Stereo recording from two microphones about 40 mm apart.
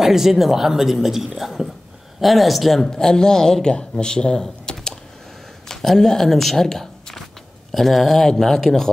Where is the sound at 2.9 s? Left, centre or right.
Centre.